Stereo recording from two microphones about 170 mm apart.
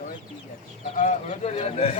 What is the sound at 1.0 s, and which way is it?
Speech, 45° left (ahead or behind).